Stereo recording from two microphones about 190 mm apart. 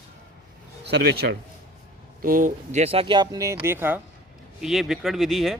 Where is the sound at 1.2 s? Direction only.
55° right (ahead or behind).